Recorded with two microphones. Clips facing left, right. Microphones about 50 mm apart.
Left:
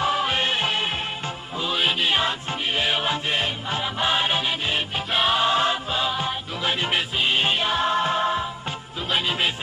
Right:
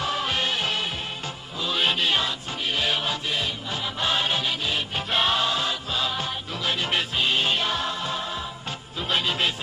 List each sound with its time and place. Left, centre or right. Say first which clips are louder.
0.0 s music: left 4 dB; centre
0.4 s music: left 3 dB; left
1.7 s music: left 1 dB; centre
3.3 s music: left 3 dB; left
3.8 s music: left 2 dB; centre
4.9 s music: left 1 dB; centre
5.4 s music: left 5 dB; left
5.9 s music: left 3 dB; centre
7.8 s music: left 7 dB; left
9.1 s music: left 1 dB; centre